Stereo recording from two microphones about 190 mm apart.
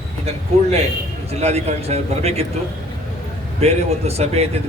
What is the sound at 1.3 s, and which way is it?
Speech, 35° right (ahead or behind).